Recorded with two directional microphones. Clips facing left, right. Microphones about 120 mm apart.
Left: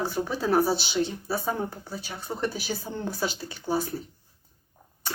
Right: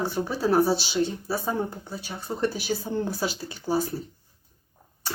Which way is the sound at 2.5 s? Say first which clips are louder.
Right 4 dB; 35° right (ahead or behind).